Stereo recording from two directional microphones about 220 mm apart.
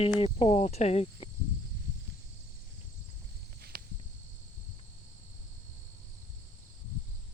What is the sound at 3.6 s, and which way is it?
Walk, 45° right (ahead or behind).